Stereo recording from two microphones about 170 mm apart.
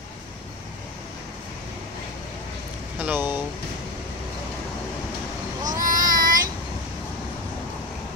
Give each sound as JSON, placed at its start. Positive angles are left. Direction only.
{"t": 3.0, "sound": "vehicle", "side_deg": -10}
{"t": 5.6, "sound": "vehicle", "side_deg": -20}
{"t": 5.9, "sound": "child singing", "side_deg": -55}